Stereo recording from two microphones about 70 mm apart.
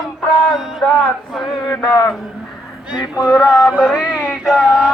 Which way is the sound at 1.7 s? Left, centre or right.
Left.